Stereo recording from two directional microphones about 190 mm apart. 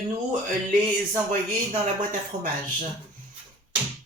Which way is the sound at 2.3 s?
45° right (ahead or behind).